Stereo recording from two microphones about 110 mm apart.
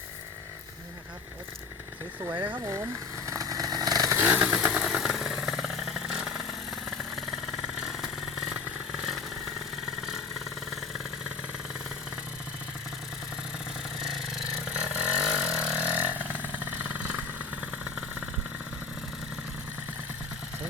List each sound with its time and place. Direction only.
2.2 s speech: 40° right (ahead or behind)
3.2 s chainsaw: 30° right (ahead or behind)
4.2 s vehicle: 15° right (ahead or behind)
14.7 s vehicle: 10° right (ahead or behind)